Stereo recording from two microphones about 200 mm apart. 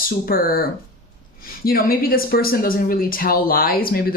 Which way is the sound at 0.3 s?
45° left (ahead or behind).